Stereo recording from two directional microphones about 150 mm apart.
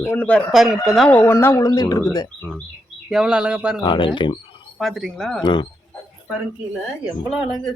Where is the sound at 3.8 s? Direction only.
35° left (ahead or behind).